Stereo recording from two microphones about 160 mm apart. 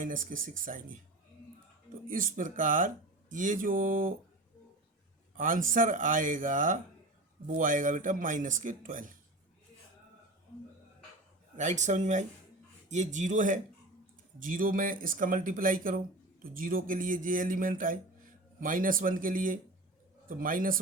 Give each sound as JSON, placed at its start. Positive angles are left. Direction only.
{"t": 0.0, "sound": "speech", "side_deg": -55}
{"t": 2.0, "sound": "speech", "side_deg": -55}
{"t": 5.4, "sound": "speech", "side_deg": -55}
{"t": 11.5, "sound": "a man's voice", "side_deg": -50}